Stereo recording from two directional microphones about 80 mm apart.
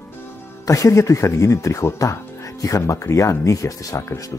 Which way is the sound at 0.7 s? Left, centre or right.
Left.